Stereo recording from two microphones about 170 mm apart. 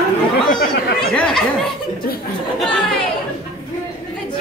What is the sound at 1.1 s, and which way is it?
Snicker, 5° left (ahead or behind).